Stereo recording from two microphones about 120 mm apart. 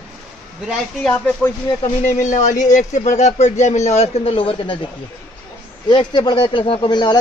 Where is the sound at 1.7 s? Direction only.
40° left (ahead or behind).